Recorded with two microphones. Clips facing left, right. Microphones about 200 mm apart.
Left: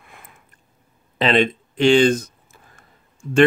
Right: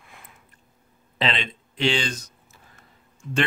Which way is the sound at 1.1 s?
50° left (ahead or behind).